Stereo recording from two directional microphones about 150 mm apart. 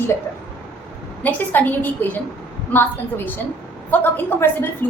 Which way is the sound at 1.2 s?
10° left (ahead or behind).